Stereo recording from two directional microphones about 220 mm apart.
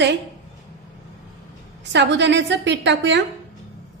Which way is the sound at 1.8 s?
50° right (ahead or behind).